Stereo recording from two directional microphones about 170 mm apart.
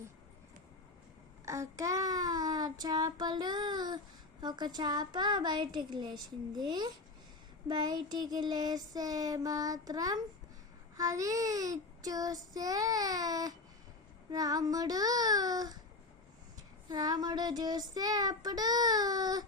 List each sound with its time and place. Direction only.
1.5 s child singing: 20° right (ahead or behind)